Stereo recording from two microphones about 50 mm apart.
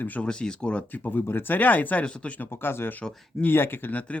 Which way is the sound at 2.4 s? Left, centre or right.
Left.